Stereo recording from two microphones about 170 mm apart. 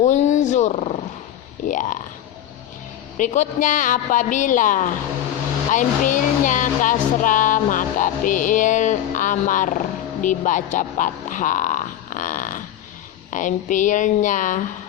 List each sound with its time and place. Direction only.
0.0 s speech: 45° left (ahead or behind)
3.2 s speech: 45° left (ahead or behind)